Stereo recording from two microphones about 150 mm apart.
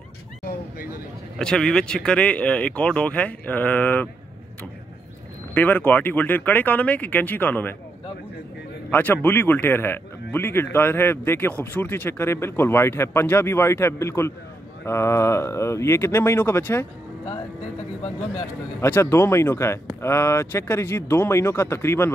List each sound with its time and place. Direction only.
1.4 s a man's voice: 5° left (ahead or behind)
5.5 s a man's voice: 10° left (ahead or behind)
8.9 s a man's voice: 15° left (ahead or behind)
18.8 s a man's voice: 15° left (ahead or behind)